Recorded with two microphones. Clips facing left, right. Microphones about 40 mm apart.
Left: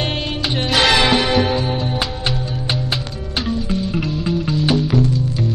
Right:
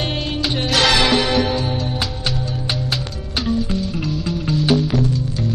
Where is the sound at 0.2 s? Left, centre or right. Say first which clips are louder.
Even; centre.